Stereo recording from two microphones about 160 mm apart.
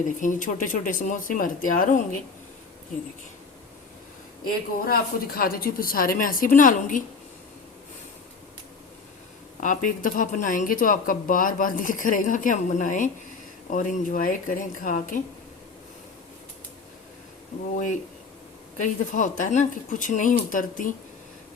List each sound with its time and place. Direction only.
0.0 s speech: 55° left (ahead or behind)
4.4 s speech: 65° left (ahead or behind)
9.6 s speech: 55° left (ahead or behind)
18.8 s speech: 55° left (ahead or behind)